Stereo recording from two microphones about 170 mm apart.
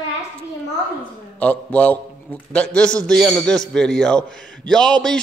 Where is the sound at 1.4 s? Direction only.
10° left (ahead or behind).